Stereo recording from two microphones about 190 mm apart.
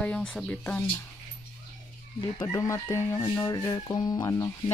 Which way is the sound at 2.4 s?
15° left (ahead or behind).